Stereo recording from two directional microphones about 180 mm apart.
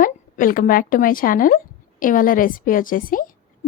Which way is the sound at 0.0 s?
50° left (ahead or behind).